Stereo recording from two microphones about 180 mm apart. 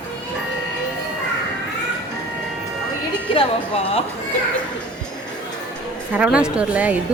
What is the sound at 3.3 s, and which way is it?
Music, 30° left (ahead or behind).